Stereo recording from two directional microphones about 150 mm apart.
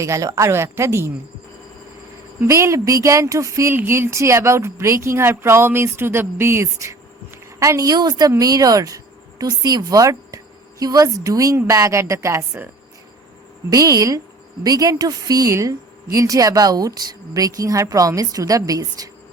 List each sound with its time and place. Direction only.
0.0 s speech: 20° right (ahead or behind)
2.4 s speech: 20° right (ahead or behind)
13.7 s speech: 25° right (ahead or behind)